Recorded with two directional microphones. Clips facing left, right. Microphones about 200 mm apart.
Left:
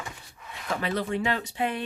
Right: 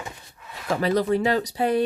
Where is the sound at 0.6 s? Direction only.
40° right (ahead or behind).